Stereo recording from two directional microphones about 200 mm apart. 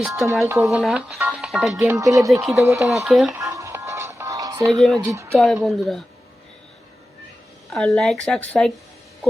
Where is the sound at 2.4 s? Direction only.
Centre (ahead or behind).